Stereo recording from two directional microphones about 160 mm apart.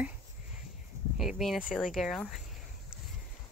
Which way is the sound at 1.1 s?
5° right (ahead or behind).